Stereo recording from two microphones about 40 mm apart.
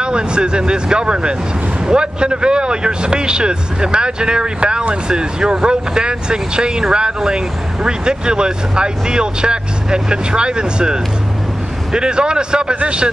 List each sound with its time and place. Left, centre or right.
0.0 s speech: right